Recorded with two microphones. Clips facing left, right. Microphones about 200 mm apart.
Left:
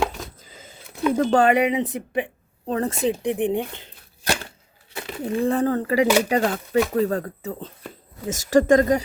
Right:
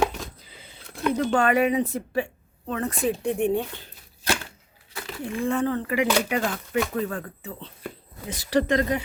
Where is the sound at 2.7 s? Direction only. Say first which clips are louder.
Left 3 dB; 35° left (ahead or behind).